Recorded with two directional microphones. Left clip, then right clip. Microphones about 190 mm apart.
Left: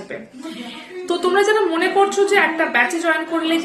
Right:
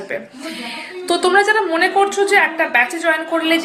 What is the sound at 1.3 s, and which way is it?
A woman's voice, 15° left (ahead or behind).